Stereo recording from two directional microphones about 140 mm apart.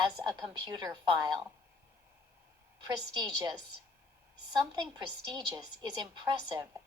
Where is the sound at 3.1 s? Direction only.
35° right (ahead or behind).